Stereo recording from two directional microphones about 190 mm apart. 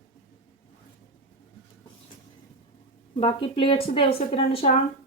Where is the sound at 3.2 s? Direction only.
30° left (ahead or behind).